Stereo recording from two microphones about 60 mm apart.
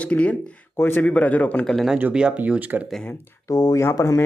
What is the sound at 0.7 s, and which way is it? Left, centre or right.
Speech, left.